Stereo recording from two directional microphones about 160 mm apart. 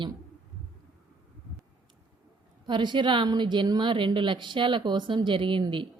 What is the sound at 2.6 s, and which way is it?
A woman's voice, 30° right (ahead or behind).